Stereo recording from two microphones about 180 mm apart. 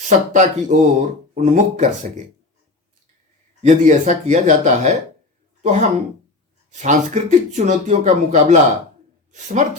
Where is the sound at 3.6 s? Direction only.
40° right (ahead or behind).